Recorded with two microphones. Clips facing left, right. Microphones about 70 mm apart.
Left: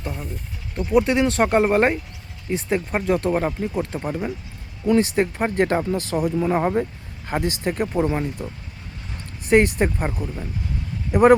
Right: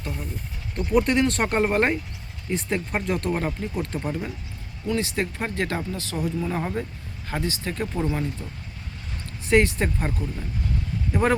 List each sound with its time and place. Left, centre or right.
0.0 s a sound: centre
0.8 s speech: centre
4.9 s speech: left
9.5 s speech: centre